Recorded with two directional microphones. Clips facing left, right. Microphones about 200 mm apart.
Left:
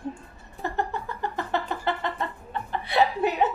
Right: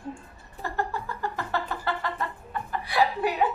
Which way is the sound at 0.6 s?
20° left (ahead or behind).